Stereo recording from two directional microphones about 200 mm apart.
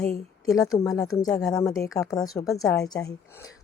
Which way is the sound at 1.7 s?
15° left (ahead or behind).